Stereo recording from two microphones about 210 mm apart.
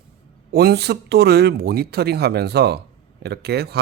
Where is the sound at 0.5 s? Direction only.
50° right (ahead or behind).